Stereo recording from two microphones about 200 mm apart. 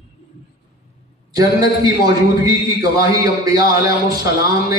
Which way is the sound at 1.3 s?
20° right (ahead or behind).